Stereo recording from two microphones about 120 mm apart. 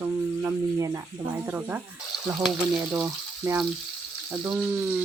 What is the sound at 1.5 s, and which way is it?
Frying, 15° right (ahead or behind).